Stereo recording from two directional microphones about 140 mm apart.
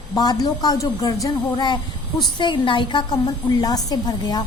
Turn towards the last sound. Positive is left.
turn(degrees=30)  # may be behind; listen again after turning